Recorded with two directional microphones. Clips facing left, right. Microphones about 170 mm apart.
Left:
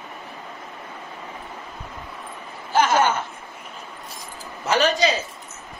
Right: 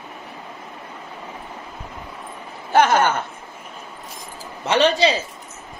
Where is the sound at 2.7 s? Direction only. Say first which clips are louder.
Right 3 dB; 60° right (ahead or behind).